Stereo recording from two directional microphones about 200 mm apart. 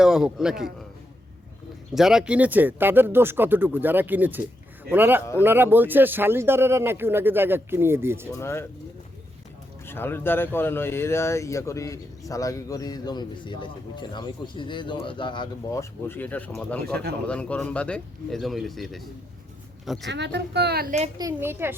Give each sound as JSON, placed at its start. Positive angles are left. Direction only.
{"t": 0.0, "sound": "speech", "side_deg": -5}
{"t": 2.0, "sound": "speech", "side_deg": -5}
{"t": 8.3, "sound": "speech", "side_deg": 15}
{"t": 9.8, "sound": "speech", "side_deg": 10}
{"t": 20.1, "sound": "a woman's voice", "side_deg": -60}
{"t": 21.2, "sound": "speech", "side_deg": -15}